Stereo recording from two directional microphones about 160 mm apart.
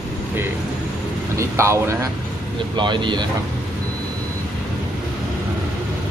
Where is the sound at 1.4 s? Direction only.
15° right (ahead or behind).